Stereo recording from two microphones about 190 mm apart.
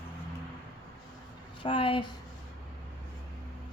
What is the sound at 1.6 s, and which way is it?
Speech, 25° left (ahead or behind).